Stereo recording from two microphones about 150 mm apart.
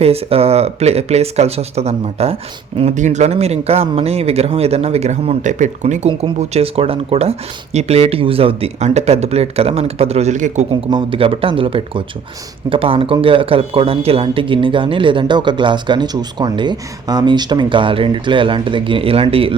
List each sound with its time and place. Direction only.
0.0 s speech: 40° right (ahead or behind)
10.7 s speech: 35° right (ahead or behind)